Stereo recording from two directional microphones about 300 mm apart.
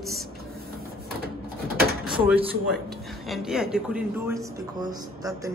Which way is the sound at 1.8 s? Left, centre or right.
Right.